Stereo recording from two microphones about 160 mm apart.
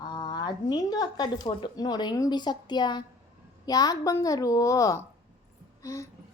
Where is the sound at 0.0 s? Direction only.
25° left (ahead or behind).